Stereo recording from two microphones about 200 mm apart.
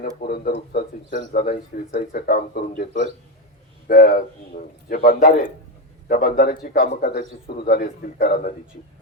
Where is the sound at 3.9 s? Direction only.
45° left (ahead or behind).